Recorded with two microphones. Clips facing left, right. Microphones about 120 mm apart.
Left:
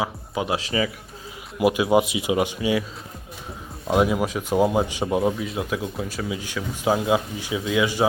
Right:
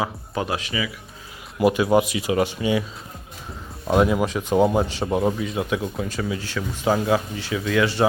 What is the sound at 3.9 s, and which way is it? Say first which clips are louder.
Speech: right 1 dB; 5° left (ahead or behind).